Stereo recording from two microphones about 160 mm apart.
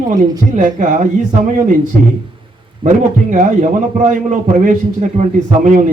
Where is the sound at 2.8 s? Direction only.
50° right (ahead or behind).